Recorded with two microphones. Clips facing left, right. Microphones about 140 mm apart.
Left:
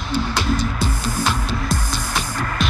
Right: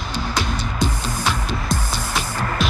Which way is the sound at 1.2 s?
Centre (ahead or behind).